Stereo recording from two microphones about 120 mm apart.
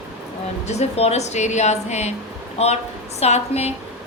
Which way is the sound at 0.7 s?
60° left (ahead or behind).